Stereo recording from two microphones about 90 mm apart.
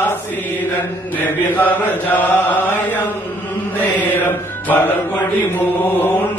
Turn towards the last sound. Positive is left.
turn(degrees=20)  # may be behind; listen again after turning